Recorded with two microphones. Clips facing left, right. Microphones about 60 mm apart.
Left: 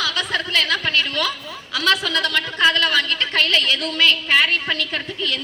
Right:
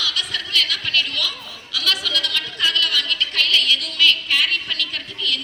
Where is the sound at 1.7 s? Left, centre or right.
Left.